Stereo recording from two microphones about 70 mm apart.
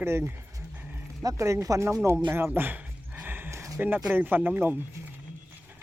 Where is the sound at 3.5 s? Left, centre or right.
Right.